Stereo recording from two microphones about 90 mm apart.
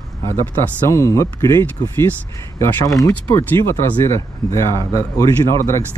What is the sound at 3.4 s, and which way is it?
Speech, 25° left (ahead or behind).